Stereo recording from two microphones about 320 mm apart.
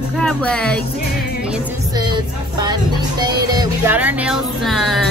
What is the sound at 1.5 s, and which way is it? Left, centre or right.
Speech, centre.